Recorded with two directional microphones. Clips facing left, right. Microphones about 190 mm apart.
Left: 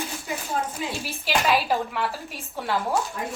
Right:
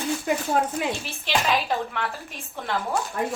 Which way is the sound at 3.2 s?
60° right (ahead or behind).